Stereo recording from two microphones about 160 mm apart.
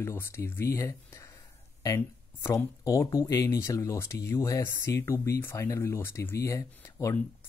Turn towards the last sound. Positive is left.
turn(degrees=15)  # may be behind; listen again after turning